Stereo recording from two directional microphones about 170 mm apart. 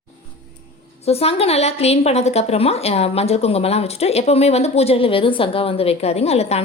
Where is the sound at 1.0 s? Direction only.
35° left (ahead or behind).